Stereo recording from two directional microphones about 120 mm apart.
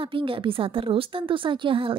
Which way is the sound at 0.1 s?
45° right (ahead or behind).